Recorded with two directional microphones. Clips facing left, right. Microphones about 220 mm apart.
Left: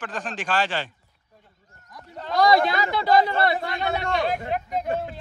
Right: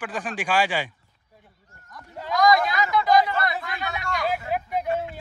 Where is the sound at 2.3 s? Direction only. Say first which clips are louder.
Left 1 dB; 30° left (ahead or behind).